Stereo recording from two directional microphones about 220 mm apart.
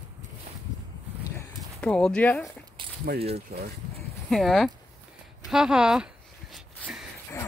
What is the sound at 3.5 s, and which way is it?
Speech, 45° right (ahead or behind).